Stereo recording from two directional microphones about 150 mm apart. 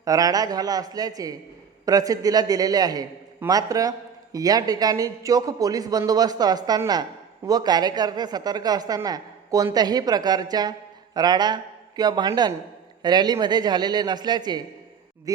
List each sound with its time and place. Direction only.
0.0 s a man's voice: 25° right (ahead or behind)